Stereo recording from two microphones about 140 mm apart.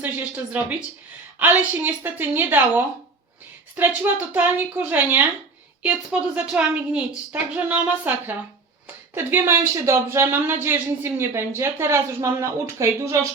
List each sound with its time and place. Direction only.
0.0 s a woman's voice: 10° right (ahead or behind)
9.1 s speech: 15° right (ahead or behind)